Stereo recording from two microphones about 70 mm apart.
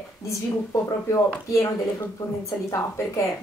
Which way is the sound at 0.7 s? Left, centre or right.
Left.